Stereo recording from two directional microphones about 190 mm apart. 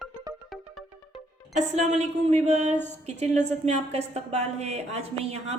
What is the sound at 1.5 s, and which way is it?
A woman's voice, 35° right (ahead or behind).